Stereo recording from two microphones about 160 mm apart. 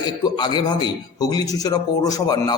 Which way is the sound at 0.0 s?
25° left (ahead or behind).